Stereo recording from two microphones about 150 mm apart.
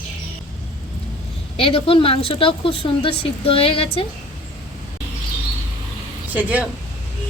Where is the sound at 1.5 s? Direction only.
35° left (ahead or behind).